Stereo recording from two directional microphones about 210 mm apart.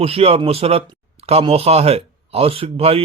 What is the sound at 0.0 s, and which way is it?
Speech, 30° right (ahead or behind).